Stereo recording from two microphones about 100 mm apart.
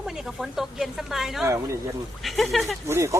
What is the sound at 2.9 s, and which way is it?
Speech, 25° right (ahead or behind).